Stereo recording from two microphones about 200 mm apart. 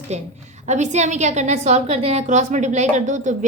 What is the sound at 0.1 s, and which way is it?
A woman's voice, 35° right (ahead or behind).